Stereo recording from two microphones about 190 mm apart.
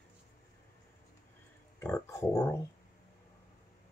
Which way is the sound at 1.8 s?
15° left (ahead or behind).